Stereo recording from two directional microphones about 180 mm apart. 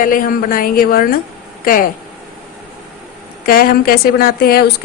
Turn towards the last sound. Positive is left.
turn(degrees=60)  # may be behind; listen again after turning